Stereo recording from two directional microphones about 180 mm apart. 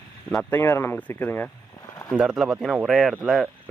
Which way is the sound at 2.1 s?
5° right (ahead or behind).